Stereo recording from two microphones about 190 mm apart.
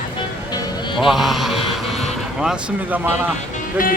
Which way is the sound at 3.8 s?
45° left (ahead or behind).